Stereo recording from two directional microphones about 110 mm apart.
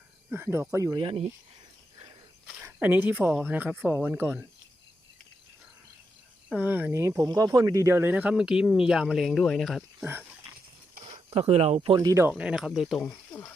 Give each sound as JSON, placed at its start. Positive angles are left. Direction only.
{"t": 0.3, "sound": "speech", "side_deg": -20}
{"t": 0.9, "sound": "speech", "side_deg": -60}
{"t": 2.6, "sound": "a woman's voice", "side_deg": -15}
{"t": 3.2, "sound": "speech", "side_deg": 0}
{"t": 3.5, "sound": "speech", "side_deg": -15}
{"t": 6.5, "sound": "speech", "side_deg": -15}
{"t": 7.3, "sound": "speech", "side_deg": -35}
{"t": 10.0, "sound": "speech", "side_deg": -15}
{"t": 11.3, "sound": "speech", "side_deg": -65}
{"t": 11.9, "sound": "speech", "side_deg": -30}
{"t": 12.3, "sound": "speech", "side_deg": -10}